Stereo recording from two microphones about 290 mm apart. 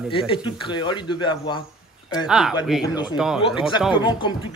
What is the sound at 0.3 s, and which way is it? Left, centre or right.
A man's voice, centre.